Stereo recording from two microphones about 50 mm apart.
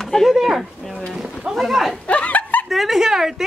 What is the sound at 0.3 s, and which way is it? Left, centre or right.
Speech, centre.